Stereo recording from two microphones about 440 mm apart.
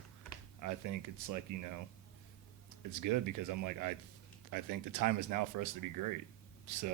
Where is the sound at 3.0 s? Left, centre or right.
Right.